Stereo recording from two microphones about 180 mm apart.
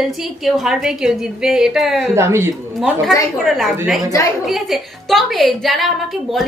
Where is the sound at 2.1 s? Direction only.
15° right (ahead or behind).